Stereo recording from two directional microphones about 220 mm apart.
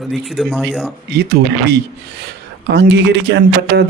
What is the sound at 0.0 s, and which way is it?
Speech, centre (ahead or behind).